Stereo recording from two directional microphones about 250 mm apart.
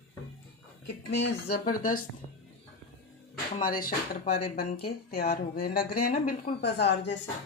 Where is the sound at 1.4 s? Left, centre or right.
Left.